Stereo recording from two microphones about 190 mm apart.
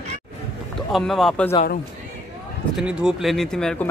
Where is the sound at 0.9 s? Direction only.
Centre (ahead or behind).